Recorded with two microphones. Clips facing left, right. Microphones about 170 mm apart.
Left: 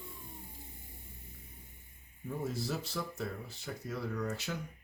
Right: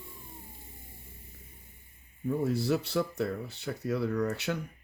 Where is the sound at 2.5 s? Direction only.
65° right (ahead or behind).